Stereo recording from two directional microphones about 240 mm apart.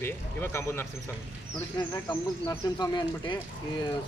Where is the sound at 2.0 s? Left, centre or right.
Centre.